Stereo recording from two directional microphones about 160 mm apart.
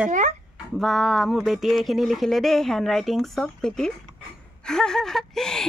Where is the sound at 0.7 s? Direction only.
Centre (ahead or behind).